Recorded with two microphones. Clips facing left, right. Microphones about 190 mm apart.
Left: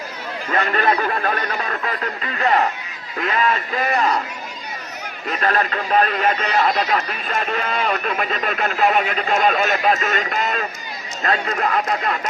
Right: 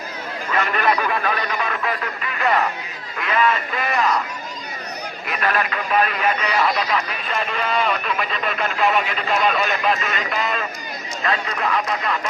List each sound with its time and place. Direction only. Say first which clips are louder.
0.5 s a man's voice: left 1 dB; 40° left (ahead or behind)
3.2 s a man's voice: even; 40° left (ahead or behind)
5.3 s speech: left 2 dB; 35° left (ahead or behind)